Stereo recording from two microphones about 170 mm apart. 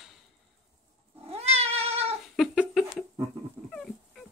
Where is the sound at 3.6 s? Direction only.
Centre (ahead or behind).